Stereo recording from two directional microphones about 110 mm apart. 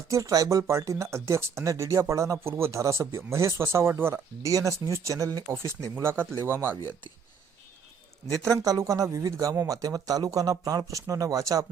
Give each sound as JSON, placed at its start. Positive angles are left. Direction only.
{"t": 0.1, "sound": "speech", "side_deg": -30}
{"t": 5.9, "sound": "speech", "side_deg": -20}
{"t": 8.5, "sound": "speech", "side_deg": -30}